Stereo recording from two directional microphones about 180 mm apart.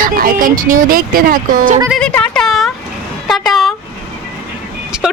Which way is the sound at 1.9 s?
5° left (ahead or behind).